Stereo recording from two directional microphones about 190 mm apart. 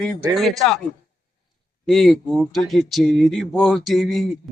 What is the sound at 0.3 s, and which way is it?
Speech, centre (ahead or behind).